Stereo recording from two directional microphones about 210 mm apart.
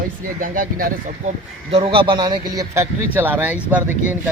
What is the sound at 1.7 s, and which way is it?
A man's voice, 25° right (ahead or behind).